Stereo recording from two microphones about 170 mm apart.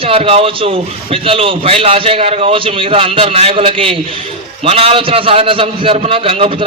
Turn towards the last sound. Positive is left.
turn(degrees=-35)  # may be behind; listen again after turning